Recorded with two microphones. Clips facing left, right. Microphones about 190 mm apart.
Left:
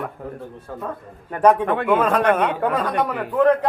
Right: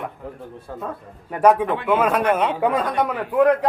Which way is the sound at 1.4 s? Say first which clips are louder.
Even; 10° right (ahead or behind).